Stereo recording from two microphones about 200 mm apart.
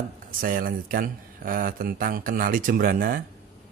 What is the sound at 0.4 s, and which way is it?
Speech, 45° right (ahead or behind).